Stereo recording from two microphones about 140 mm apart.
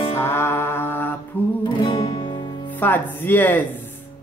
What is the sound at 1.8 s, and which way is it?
Music, 35° left (ahead or behind).